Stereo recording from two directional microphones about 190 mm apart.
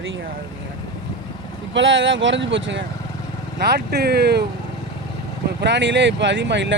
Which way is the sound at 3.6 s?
60° right (ahead or behind).